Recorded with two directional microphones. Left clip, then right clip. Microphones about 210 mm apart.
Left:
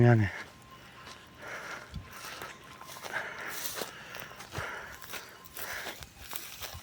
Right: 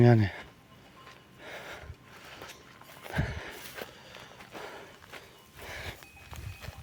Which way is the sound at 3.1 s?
45° right (ahead or behind).